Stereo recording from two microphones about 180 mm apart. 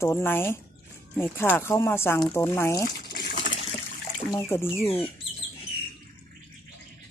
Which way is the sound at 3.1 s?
55° left (ahead or behind).